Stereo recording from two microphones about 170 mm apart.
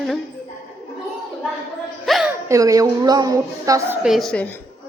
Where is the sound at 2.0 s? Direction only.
Centre (ahead or behind).